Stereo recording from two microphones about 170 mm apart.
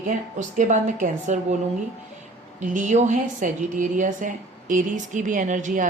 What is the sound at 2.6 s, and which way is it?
A woman's voice, 50° right (ahead or behind).